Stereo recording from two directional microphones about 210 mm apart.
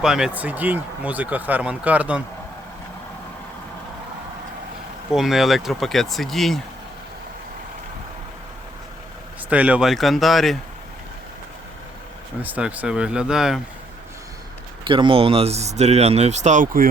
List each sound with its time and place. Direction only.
0.0 s speech: 5° right (ahead or behind)
5.1 s speech: centre (ahead or behind)
9.5 s speech: 5° right (ahead or behind)
12.4 s speech: 5° right (ahead or behind)
14.8 s speech: 25° right (ahead or behind); by 16.9 s 40° right (ahead or behind)